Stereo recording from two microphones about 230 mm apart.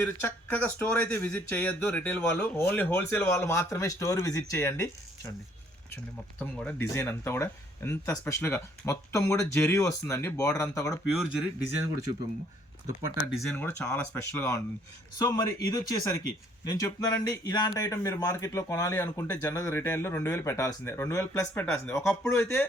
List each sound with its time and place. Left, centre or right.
0.0 s speech: centre
6.4 s speech: centre
11.1 s speech: centre
13.3 s speech: centre